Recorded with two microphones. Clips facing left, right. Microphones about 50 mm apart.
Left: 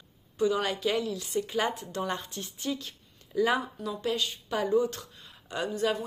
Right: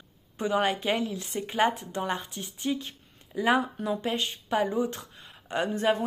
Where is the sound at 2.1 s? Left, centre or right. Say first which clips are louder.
Right 2 dB; centre.